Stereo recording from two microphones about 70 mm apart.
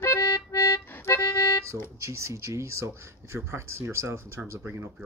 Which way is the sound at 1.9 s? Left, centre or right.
Right.